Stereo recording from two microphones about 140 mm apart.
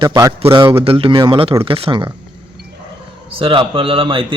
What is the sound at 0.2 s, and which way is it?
Speech, 20° right (ahead or behind).